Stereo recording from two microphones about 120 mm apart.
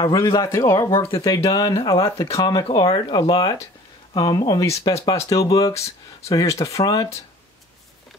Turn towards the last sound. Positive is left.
turn(degrees=30)  # may be behind; listen again after turning